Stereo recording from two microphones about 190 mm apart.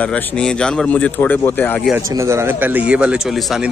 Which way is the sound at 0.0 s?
10° left (ahead or behind).